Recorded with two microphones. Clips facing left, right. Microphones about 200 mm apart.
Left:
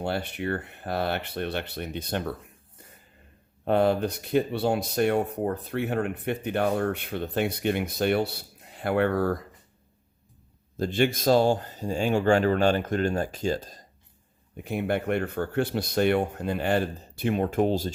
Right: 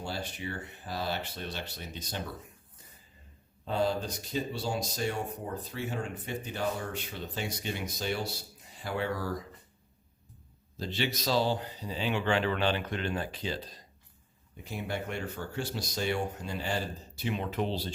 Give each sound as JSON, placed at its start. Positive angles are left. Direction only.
{"t": 0.0, "sound": "speech", "side_deg": 60}
{"t": 10.8, "sound": "speech", "side_deg": 50}
{"t": 14.5, "sound": "speech", "side_deg": 60}